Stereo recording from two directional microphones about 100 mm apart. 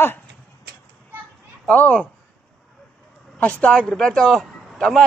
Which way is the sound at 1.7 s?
10° left (ahead or behind).